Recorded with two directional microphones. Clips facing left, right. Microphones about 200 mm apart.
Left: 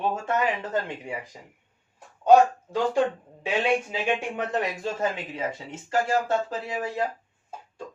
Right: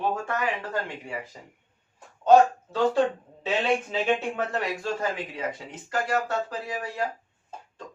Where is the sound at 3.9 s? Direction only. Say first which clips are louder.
Right 2 dB; 15° left (ahead or behind).